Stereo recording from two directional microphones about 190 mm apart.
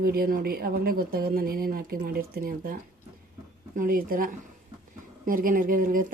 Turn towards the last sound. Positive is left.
turn(degrees=-45)  # may be behind; listen again after turning